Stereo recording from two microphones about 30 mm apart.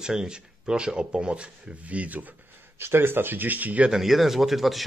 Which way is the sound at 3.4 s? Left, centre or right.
Right.